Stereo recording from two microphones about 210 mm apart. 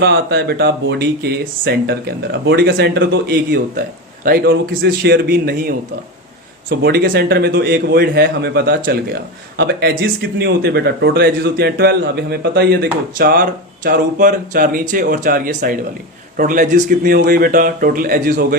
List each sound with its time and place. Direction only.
0.0 s speech: 50° right (ahead or behind)